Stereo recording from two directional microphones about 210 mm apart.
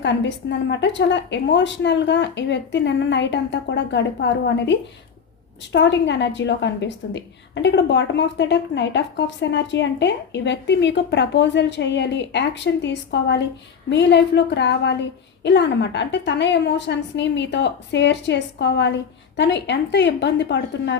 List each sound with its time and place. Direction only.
0.0 s a woman's voice: 55° left (ahead or behind)